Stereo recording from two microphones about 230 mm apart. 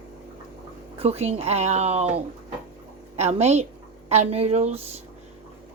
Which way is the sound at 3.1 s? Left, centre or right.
Right.